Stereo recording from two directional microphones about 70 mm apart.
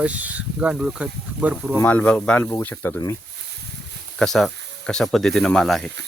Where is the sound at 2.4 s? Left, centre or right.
Left.